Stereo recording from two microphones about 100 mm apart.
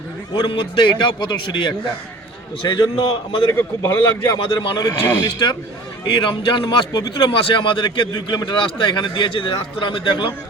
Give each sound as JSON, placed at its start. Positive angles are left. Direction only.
{"t": 0.3, "sound": "a man's voice", "side_deg": 55}
{"t": 3.5, "sound": "a man's voice", "side_deg": 20}
{"t": 4.4, "sound": "a man's voice", "side_deg": 55}